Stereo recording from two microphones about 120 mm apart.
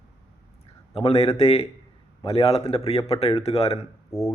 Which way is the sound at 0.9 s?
55° left (ahead or behind).